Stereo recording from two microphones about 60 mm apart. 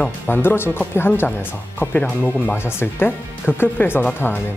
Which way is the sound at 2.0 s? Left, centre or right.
Left.